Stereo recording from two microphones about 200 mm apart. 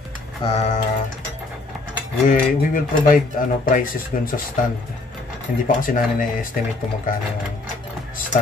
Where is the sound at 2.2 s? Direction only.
45° left (ahead or behind).